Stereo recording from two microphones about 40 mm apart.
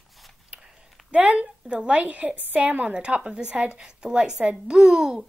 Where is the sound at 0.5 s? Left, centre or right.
Right.